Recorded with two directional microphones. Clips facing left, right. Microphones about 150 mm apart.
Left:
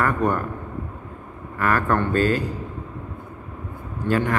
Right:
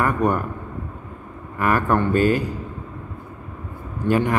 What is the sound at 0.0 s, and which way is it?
Speech, 15° right (ahead or behind).